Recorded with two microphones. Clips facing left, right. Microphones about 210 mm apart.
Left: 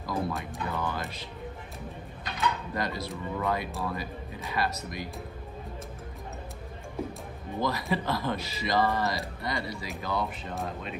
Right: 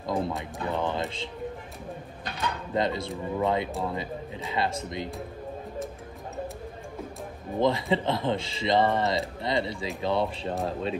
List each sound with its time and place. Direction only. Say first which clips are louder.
0.0 s music: right 3 dB; 25° right (ahead or behind)
0.4 s speech: right 4 dB; 25° right (ahead or behind)
2.7 s speech: right 5 dB; 25° right (ahead or behind)
7.6 s speech: right 5 dB; 25° right (ahead or behind)